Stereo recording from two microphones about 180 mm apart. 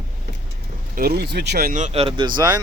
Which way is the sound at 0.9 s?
60° right (ahead or behind).